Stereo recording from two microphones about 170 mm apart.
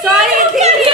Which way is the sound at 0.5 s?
40° right (ahead or behind).